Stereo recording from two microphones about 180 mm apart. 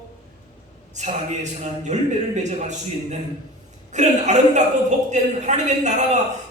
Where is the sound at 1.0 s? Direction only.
40° right (ahead or behind).